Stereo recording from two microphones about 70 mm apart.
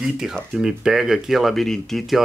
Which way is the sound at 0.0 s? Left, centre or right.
Centre.